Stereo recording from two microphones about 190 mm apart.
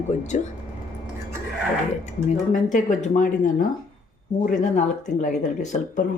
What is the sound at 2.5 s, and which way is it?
A woman's voice, 40° left (ahead or behind).